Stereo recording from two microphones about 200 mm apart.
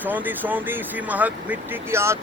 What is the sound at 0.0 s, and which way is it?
Speech, 10° right (ahead or behind).